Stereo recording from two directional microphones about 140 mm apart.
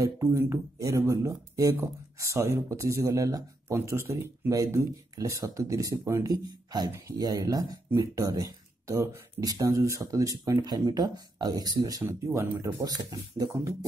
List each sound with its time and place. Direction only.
0.0 s speech: 20° right (ahead or behind)